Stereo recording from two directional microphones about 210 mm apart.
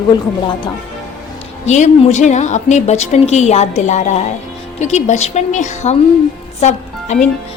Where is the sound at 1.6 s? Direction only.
35° left (ahead or behind).